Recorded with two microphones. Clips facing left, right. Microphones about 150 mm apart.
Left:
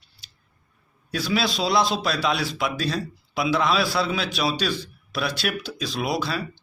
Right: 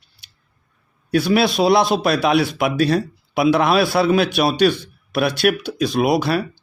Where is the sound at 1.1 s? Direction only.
60° right (ahead or behind).